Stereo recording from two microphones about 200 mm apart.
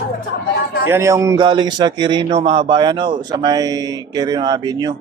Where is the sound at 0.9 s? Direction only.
15° right (ahead or behind).